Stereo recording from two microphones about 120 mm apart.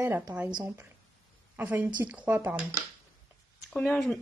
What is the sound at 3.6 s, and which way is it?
Speech, 5° left (ahead or behind).